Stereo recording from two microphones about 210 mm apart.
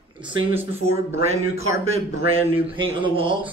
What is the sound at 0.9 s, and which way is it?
Speech, 30° right (ahead or behind).